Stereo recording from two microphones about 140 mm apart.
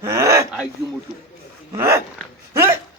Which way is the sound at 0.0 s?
20° right (ahead or behind).